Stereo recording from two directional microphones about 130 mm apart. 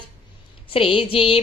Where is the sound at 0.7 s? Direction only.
45° left (ahead or behind).